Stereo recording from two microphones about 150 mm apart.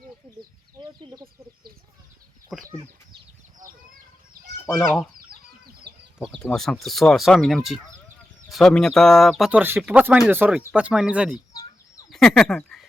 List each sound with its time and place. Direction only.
0.8 s bird: 30° right (ahead or behind)
2.5 s chicken: centre (ahead or behind)
4.8 s speech: centre (ahead or behind)
5.3 s chicken: 80° right
6.1 s speech: centre (ahead or behind)
9.5 s speech: 10° right (ahead or behind)
12.1 s speech: 5° left (ahead or behind)